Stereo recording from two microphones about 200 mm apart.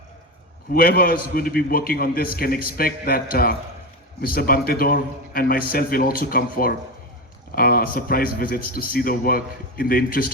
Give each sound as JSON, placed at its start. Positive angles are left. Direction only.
{"t": 0.7, "sound": "a man's voice", "side_deg": 45}